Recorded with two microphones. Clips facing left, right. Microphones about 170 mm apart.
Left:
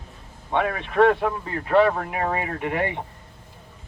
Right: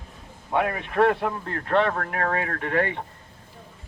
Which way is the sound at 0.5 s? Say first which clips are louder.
Left 2 dB; 5° right (ahead or behind).